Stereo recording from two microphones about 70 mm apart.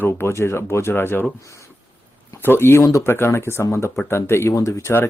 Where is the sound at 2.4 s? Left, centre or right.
Left.